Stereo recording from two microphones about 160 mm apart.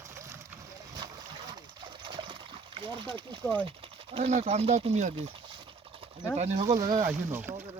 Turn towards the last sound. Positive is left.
turn(degrees=-15)  # may be behind; listen again after turning